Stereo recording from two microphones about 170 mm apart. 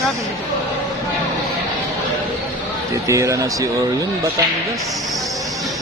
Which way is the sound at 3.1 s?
20° right (ahead or behind).